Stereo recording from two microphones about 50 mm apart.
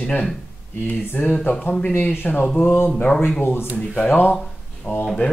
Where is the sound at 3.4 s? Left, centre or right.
Left.